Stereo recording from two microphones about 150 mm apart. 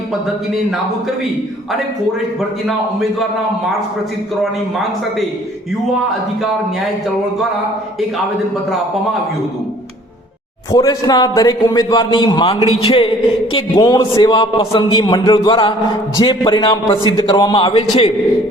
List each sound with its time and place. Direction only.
2.6 s a man's voice: centre (ahead or behind)
10.7 s a man's voice: 25° left (ahead or behind)
12.6 s a man's voice: 40° left (ahead or behind)
13.5 s a man's voice: 25° left (ahead or behind)